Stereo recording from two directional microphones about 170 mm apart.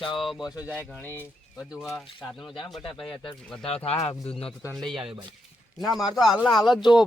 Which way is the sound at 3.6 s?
35° left (ahead or behind).